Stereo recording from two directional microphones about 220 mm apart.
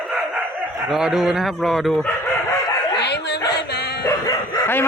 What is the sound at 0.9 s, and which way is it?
Speech, centre (ahead or behind).